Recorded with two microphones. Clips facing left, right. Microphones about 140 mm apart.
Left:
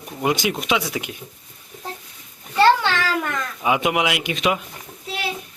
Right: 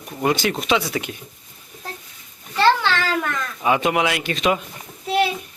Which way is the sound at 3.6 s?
10° left (ahead or behind).